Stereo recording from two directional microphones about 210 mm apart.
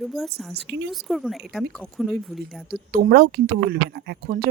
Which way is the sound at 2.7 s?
45° right (ahead or behind).